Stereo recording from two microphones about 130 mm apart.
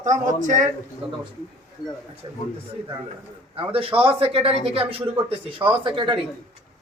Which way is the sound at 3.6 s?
45° right (ahead or behind).